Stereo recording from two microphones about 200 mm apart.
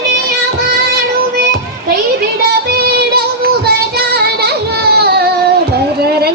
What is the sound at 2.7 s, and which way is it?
Child singing, 50° right (ahead or behind).